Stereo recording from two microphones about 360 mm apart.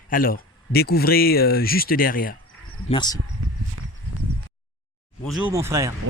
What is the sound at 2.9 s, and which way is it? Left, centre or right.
Speech, centre.